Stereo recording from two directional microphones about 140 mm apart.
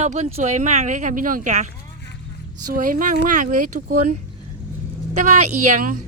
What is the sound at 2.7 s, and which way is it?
Speech, 80° right.